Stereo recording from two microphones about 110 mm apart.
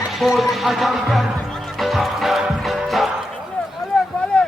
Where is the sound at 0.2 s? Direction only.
Centre (ahead or behind).